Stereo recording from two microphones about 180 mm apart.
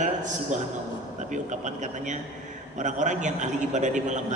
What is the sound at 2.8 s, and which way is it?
A man's voice, 45° right (ahead or behind).